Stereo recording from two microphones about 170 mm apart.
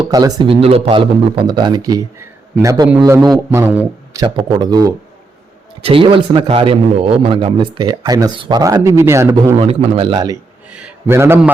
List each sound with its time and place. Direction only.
0.0 s a man's voice: 20° right (ahead or behind)
9.6 s a man's voice: 30° right (ahead or behind)
10.7 s a man's voice: 5° right (ahead or behind)